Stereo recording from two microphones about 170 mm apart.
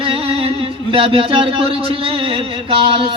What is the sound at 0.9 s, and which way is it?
Speech, 30° right (ahead or behind).